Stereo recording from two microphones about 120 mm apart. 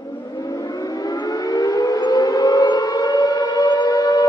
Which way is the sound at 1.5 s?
30° left (ahead or behind).